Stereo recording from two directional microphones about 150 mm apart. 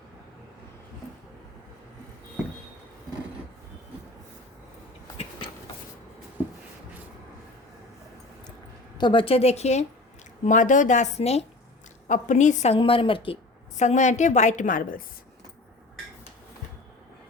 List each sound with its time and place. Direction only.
9.0 s a woman's voice: 30° left (ahead or behind)
10.4 s a woman's voice: 60° left (ahead or behind)
12.0 s a woman's voice: 55° left (ahead or behind); by 13.4 s 35° left (ahead or behind)
13.7 s a woman's voice: 55° left (ahead or behind)